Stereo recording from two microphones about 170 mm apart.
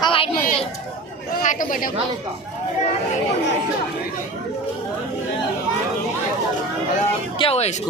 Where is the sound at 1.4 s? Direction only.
50° left (ahead or behind).